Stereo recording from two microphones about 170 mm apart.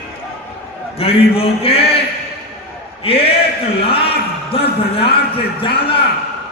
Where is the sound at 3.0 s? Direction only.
35° left (ahead or behind).